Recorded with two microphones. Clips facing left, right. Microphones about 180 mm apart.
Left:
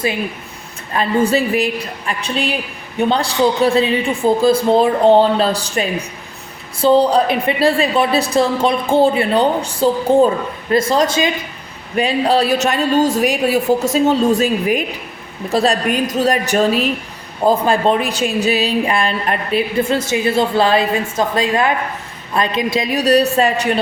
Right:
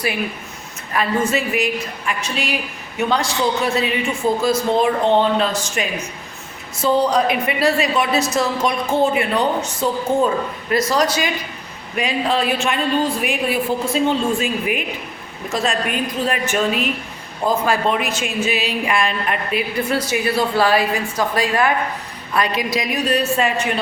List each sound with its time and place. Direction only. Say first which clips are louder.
0.9 s a woman's voice: left 4 dB; 35° left (ahead or behind)